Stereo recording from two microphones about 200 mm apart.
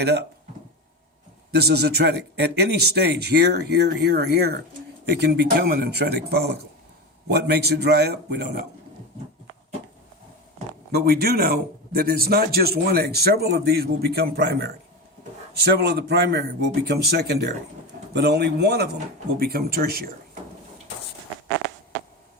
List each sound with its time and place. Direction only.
0.0 s a man's voice: 55° right (ahead or behind)
1.5 s a man's voice: 55° right (ahead or behind)
10.9 s a man's voice: 50° right (ahead or behind)
21.5 s a sound: 60° right (ahead or behind)